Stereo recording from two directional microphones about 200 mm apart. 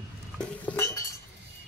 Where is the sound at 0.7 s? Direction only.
15° left (ahead or behind).